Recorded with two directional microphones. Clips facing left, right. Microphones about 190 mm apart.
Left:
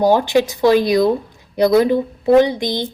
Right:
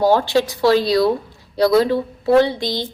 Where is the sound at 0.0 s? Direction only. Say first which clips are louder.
Left 2 dB; 15° left (ahead or behind).